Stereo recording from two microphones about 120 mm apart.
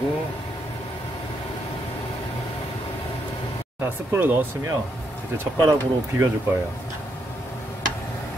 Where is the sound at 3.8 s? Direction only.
20° right (ahead or behind).